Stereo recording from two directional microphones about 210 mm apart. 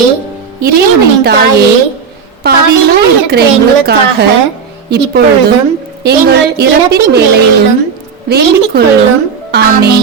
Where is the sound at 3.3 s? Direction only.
50° right (ahead or behind).